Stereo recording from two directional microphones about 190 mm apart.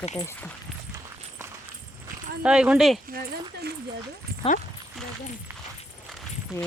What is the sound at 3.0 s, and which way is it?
Speech, 50° right (ahead or behind).